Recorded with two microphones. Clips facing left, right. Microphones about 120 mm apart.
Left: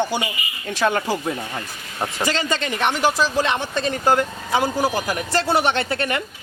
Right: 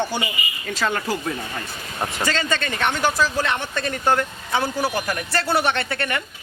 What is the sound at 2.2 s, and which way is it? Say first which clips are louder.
Speech: left 1 dB; 15° left (ahead or behind).